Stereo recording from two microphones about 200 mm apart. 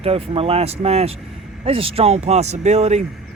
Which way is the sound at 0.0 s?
30° right (ahead or behind).